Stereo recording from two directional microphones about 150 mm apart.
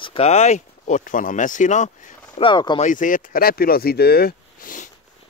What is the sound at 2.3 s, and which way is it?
Speech, 30° left (ahead or behind).